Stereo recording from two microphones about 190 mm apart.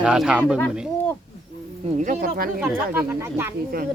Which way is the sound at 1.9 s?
40° right (ahead or behind).